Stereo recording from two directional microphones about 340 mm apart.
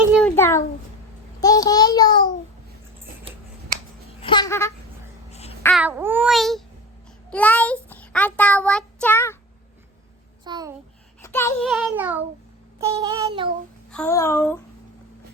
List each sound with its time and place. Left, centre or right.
0.0 s a child's voice: centre
1.4 s a sound: centre
4.2 s a sound: centre
5.3 s babbling: centre
5.6 s a child's voice: centre
7.3 s child singing: centre
10.4 s a child's voice: centre
11.2 s a child's voice: centre
12.8 s child singing: centre
13.9 s a sound: centre